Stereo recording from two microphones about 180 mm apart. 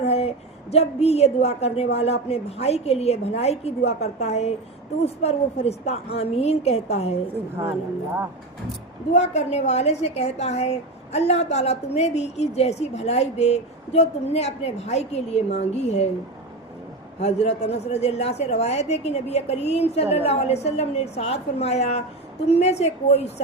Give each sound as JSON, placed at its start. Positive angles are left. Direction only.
{"t": 0.0, "sound": "a woman's voice", "side_deg": 35}
{"t": 9.1, "sound": "a woman's voice", "side_deg": 40}
{"t": 17.2, "sound": "a woman's voice", "side_deg": 35}